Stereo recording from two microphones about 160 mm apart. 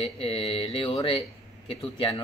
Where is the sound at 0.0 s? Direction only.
35° left (ahead or behind).